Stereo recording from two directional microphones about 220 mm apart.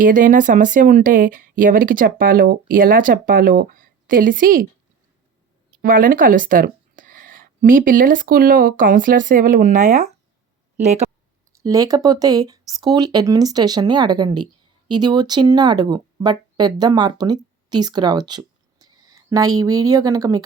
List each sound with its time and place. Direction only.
0.0 s speech: 35° right (ahead or behind)
5.8 s speech: 40° right (ahead or behind)
11.6 s speech: 15° right (ahead or behind)